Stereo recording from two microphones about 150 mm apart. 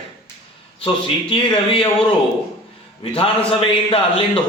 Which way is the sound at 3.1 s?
40° left (ahead or behind).